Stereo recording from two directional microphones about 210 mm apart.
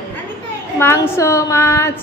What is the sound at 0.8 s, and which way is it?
A woman's voice, 10° left (ahead or behind).